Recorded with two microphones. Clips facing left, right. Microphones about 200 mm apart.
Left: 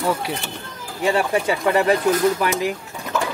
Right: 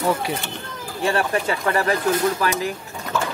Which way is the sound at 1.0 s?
10° left (ahead or behind).